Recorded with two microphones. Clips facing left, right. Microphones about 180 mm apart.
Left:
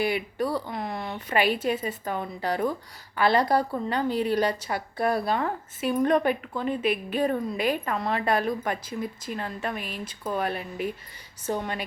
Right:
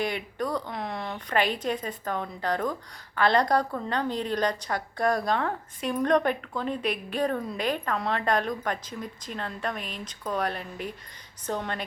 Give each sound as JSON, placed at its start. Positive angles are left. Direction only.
{"t": 0.0, "sound": "a woman's voice", "side_deg": 5}